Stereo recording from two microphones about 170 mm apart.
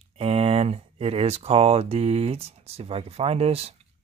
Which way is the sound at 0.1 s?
35° right (ahead or behind).